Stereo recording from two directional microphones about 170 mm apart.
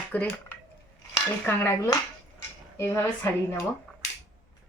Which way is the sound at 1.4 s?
15° left (ahead or behind).